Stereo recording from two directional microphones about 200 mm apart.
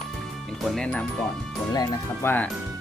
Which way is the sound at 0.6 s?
Centre (ahead or behind).